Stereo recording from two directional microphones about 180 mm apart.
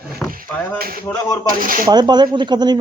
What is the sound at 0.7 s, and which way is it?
Speech, 55° right (ahead or behind).